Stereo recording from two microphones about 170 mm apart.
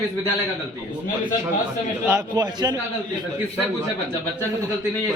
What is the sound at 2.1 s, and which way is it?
Speech, 20° right (ahead or behind).